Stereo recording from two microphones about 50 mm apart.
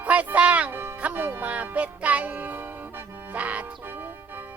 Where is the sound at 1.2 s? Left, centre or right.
Right.